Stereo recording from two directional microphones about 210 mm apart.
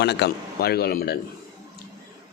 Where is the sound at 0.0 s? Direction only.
50° left (ahead or behind).